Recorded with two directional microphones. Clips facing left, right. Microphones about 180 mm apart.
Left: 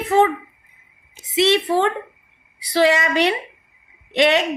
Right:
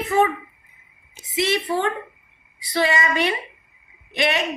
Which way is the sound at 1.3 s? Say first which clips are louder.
Left 5 dB; 75° left (ahead or behind).